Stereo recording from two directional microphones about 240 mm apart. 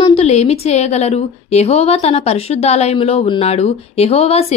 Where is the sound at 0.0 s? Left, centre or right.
Left.